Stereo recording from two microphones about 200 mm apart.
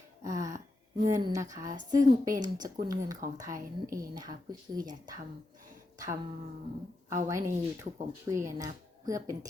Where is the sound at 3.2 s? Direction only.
45° right (ahead or behind).